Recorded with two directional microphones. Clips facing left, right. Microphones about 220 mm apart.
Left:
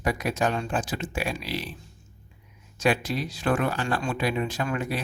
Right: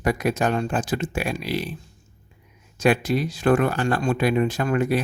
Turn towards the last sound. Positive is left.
turn(degrees=-50)  # may be behind; listen again after turning